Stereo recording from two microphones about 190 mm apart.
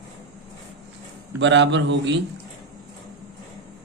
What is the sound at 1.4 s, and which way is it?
Speech, 70° right (ahead or behind).